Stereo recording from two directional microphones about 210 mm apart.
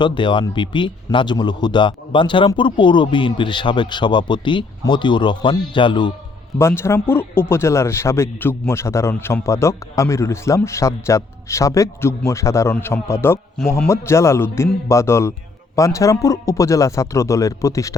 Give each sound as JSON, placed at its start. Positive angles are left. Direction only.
{"t": 0.0, "sound": "speech", "side_deg": 20}